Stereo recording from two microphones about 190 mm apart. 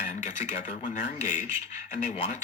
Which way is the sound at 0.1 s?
40° left (ahead or behind).